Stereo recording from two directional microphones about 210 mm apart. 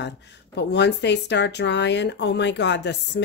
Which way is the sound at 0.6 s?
55° left (ahead or behind).